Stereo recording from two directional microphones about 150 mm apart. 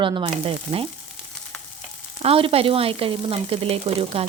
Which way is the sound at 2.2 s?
40° right (ahead or behind).